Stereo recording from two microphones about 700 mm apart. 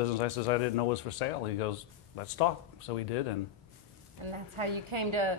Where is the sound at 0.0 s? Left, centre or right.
Left.